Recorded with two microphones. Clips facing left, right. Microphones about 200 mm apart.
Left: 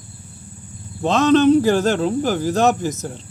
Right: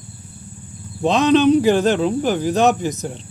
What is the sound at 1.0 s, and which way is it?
Speech, 15° right (ahead or behind).